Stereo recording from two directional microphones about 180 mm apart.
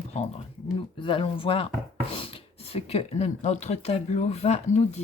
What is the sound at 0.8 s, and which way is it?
Speech, 30° left (ahead or behind).